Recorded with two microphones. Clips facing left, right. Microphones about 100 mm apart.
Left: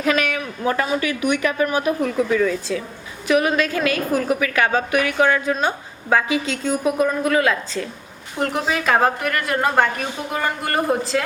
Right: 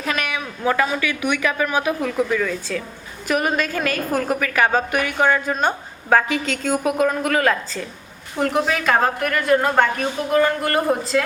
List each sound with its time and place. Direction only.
0.7 s a woman's voice: 40° left (ahead or behind)
3.2 s a woman's voice: 40° right (ahead or behind)
6.7 s a woman's voice: 65° right (ahead or behind); by 7.8 s 50° right (ahead or behind)
8.4 s a woman's voice: centre (ahead or behind)